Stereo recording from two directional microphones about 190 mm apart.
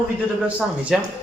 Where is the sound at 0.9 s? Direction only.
Centre (ahead or behind).